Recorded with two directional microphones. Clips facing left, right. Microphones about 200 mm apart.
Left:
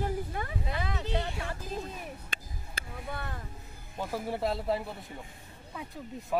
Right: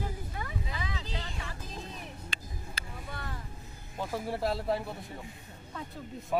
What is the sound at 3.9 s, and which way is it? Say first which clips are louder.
A man's voice: left 1 dB; centre (ahead or behind).